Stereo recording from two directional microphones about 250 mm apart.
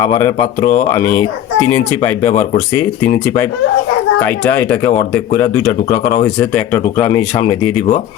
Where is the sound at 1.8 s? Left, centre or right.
Centre.